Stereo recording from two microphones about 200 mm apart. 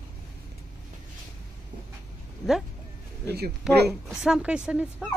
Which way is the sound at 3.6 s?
5° right (ahead or behind).